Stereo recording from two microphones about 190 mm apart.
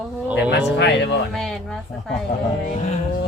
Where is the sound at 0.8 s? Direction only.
60° left (ahead or behind).